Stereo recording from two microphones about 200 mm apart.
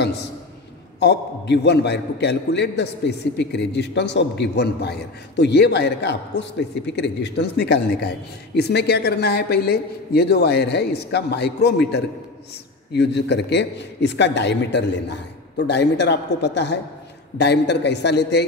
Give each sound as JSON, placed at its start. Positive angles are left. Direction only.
{"t": 0.9, "sound": "a man's voice", "side_deg": 55}